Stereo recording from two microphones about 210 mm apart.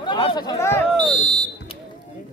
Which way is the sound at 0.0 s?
20° left (ahead or behind).